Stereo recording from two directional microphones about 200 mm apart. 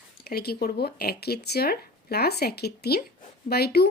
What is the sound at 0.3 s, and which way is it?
Speech, 50° left (ahead or behind).